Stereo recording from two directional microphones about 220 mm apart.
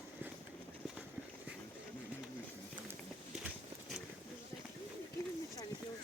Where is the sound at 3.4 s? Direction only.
5° right (ahead or behind).